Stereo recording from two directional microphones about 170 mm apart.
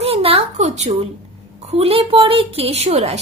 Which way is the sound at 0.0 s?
35° right (ahead or behind).